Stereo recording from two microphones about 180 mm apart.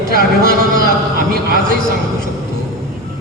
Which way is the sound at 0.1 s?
60° left (ahead or behind).